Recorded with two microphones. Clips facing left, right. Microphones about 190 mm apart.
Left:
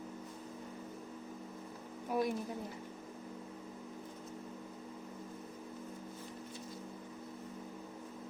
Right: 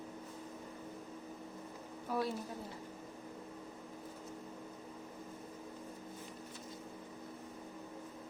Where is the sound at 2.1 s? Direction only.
15° left (ahead or behind).